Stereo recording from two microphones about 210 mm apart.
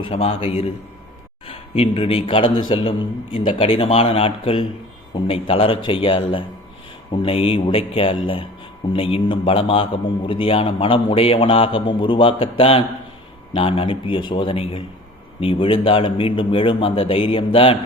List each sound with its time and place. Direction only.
0.0 s a man's voice: 30° left (ahead or behind)